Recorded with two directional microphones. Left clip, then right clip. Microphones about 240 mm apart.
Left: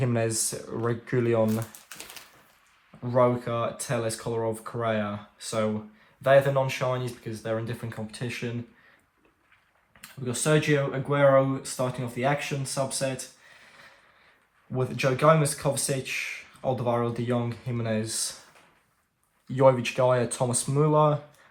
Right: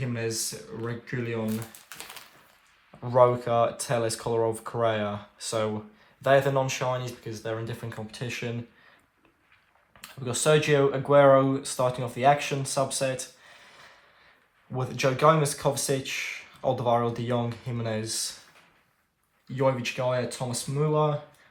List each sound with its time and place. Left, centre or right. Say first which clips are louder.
0.0 s speech: left 4 dB; centre
3.0 s speech: right 2 dB; centre
10.2 s speech: right 2 dB; centre
14.7 s speech: even; centre
19.5 s speech: left 5 dB; centre